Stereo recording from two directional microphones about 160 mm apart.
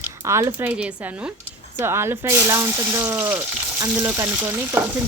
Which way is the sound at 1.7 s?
15° right (ahead or behind).